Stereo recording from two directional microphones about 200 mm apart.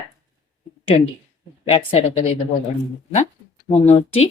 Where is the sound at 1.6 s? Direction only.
30° left (ahead or behind).